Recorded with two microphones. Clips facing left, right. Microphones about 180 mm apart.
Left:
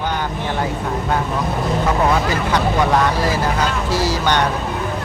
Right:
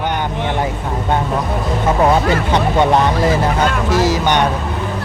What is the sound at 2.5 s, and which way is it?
Vehicle, 25° right (ahead or behind).